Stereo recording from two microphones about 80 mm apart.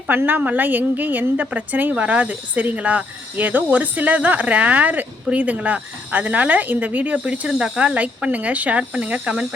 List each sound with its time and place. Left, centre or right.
0.1 s a woman's voice: right